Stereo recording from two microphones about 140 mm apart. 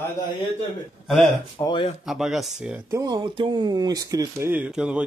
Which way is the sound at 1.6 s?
25° left (ahead or behind).